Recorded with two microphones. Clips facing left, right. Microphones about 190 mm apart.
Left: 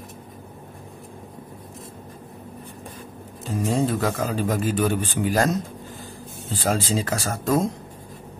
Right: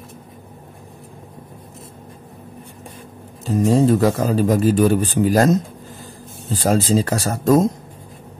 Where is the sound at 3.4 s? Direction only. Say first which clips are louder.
Right 7 dB; 40° right (ahead or behind).